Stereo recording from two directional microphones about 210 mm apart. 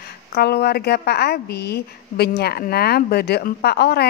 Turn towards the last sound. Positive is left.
turn(degrees=50)  # may be behind; listen again after turning